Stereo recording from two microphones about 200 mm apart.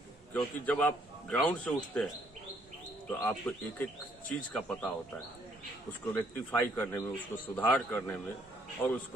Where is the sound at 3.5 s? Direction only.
10° left (ahead or behind).